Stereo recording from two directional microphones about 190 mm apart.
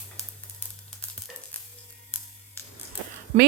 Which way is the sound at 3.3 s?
35° right (ahead or behind).